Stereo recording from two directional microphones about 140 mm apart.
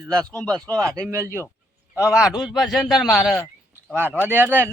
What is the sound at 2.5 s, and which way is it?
Speech, centre (ahead or behind).